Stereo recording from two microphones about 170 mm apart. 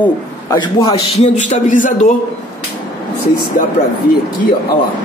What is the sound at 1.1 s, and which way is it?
Speech, 40° left (ahead or behind).